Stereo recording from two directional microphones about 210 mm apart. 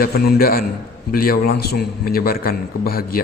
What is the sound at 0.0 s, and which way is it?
A man's voice, 50° left (ahead or behind).